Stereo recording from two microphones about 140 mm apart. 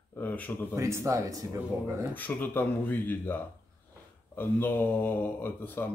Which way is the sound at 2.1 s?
15° left (ahead or behind).